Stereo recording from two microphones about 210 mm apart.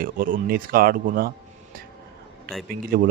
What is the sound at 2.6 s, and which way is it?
Speech, 45° right (ahead or behind).